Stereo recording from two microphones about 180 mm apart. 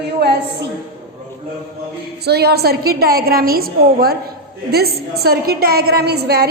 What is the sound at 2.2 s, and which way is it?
A woman's voice, 65° right (ahead or behind).